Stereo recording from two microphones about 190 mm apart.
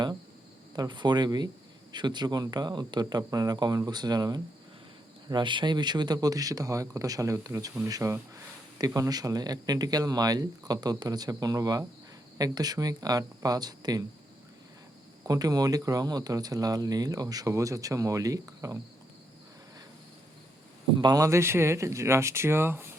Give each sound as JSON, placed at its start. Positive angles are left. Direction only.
{"t": 0.8, "sound": "speech", "side_deg": -25}
{"t": 15.3, "sound": "speech", "side_deg": -20}
{"t": 21.0, "sound": "speech", "side_deg": -20}